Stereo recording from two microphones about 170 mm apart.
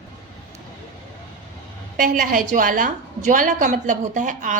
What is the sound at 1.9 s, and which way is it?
A woman's voice, 55° right (ahead or behind).